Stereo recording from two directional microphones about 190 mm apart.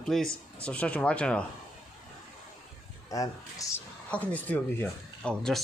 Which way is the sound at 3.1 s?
20° left (ahead or behind).